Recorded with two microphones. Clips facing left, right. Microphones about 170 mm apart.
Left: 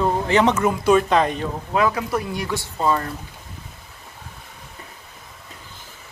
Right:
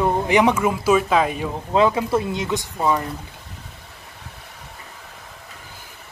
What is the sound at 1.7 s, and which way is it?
Speech, 25° right (ahead or behind).